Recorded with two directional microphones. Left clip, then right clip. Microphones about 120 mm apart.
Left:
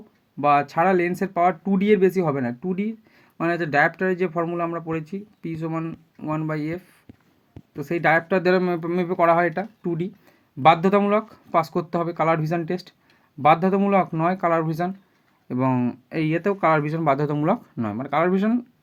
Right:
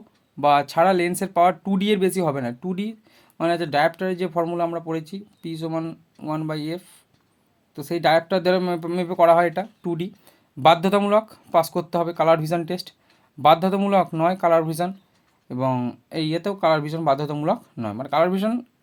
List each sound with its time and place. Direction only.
0.3 s speech: 45° right (ahead or behind)
1.6 s speech: 30° right (ahead or behind)
2.2 s speech: 50° right (ahead or behind)
3.4 s speech: 20° right (ahead or behind)
4.4 s speech: 35° right (ahead or behind)
6.5 s speech: 15° right (ahead or behind)
7.9 s speech: 35° right (ahead or behind)
8.4 s speech: 15° right (ahead or behind)
9.8 s speech: 35° right (ahead or behind)
11.5 s speech: 25° right (ahead or behind)
15.4 s speech: 5° right (ahead or behind)